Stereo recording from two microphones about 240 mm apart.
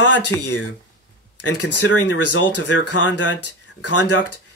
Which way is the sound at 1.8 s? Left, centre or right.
Left.